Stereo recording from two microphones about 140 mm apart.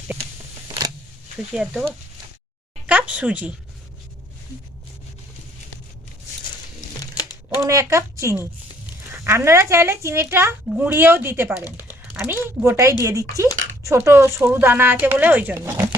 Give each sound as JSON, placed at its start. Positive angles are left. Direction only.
{"t": 2.8, "sound": "a woman's voice", "side_deg": -10}
{"t": 7.5, "sound": "a woman's voice", "side_deg": -20}
{"t": 11.6, "sound": "a sound", "side_deg": 25}
{"t": 12.2, "sound": "a woman's voice", "side_deg": -10}